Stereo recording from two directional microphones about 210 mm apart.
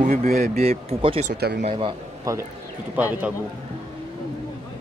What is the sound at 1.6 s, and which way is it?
Speech, 25° right (ahead or behind).